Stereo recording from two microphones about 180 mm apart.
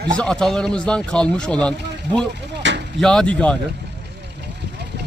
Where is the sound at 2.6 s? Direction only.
85° right.